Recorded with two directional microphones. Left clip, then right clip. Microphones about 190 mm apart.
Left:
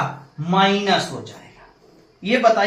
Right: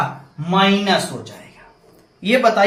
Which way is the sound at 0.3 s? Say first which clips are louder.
Right 1 dB; 15° right (ahead or behind).